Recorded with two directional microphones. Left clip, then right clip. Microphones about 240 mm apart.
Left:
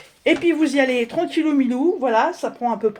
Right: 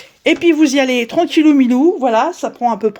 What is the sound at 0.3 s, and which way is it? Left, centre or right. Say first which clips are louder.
Speech: right 6 dB; right.